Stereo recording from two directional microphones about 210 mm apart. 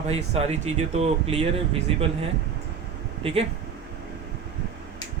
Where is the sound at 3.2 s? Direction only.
25° right (ahead or behind).